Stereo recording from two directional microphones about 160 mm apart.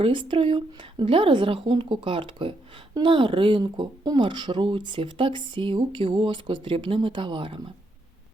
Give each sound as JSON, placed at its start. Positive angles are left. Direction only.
{"t": 0.0, "sound": "a woman's voice", "side_deg": -30}